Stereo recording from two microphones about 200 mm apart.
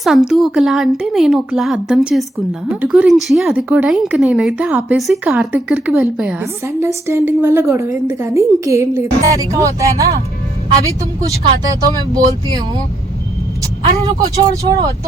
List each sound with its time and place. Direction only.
0.0 s a woman's voice: centre (ahead or behind)
11.8 s speech: 20° right (ahead or behind)
14.3 s a woman's voice: 15° right (ahead or behind)